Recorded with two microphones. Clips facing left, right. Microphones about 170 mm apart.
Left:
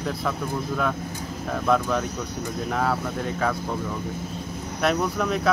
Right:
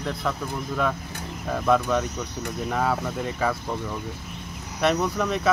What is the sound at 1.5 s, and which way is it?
Speech, centre (ahead or behind).